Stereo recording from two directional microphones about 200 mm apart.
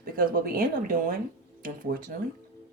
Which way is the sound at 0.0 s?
45° right (ahead or behind).